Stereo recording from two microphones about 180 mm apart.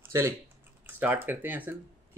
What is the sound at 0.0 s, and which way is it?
Typing, 15° right (ahead or behind).